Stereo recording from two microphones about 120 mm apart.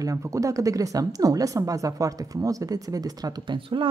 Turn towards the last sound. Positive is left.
turn(degrees=-45)  # may be behind; listen again after turning